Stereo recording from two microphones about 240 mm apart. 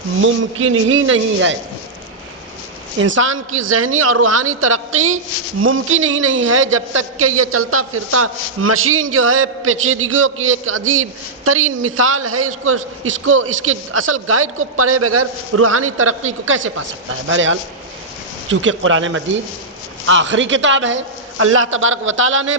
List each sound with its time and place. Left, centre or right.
0.2 s a man's voice: right
3.0 s a man's voice: right